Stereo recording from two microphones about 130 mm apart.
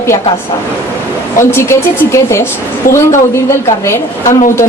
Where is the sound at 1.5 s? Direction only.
20° left (ahead or behind).